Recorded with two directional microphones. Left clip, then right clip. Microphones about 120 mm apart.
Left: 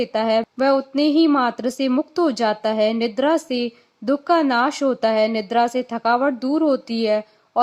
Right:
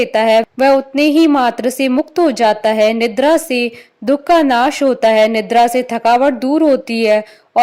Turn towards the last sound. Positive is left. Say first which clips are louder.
# right 8 dB
turn(degrees=-45)  # may be behind; listen again after turning